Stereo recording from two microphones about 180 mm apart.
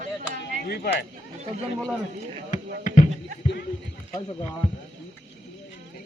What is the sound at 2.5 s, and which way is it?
Basketball bounce, 45° left (ahead or behind).